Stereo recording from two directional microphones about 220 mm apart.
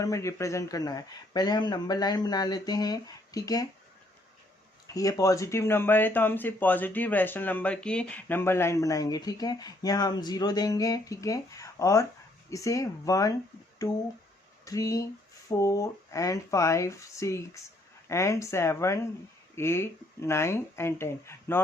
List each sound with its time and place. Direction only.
0.0 s speech: 15° left (ahead or behind)
4.9 s speech: 15° left (ahead or behind)
14.6 s speech: 15° left (ahead or behind)